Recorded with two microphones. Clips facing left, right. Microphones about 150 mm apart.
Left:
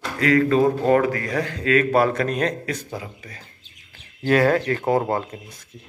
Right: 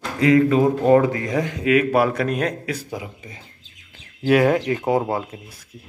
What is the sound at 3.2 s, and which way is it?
A man's voice, 20° right (ahead or behind).